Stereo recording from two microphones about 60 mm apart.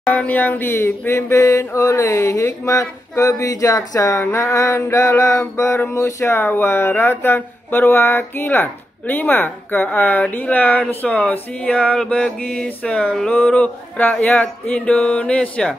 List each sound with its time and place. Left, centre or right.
0.1 s speech: left
1.3 s speech: left; by 12.4 s centre
12.8 s a sound: centre
13.3 s speech: left